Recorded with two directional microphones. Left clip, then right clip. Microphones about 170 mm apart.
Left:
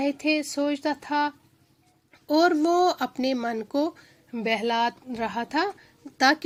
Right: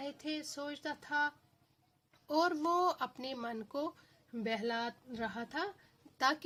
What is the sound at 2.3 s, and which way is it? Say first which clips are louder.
Speech: left 11 dB; 25° left (ahead or behind).